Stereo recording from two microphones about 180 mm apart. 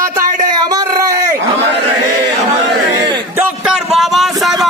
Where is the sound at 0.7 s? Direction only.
20° right (ahead or behind).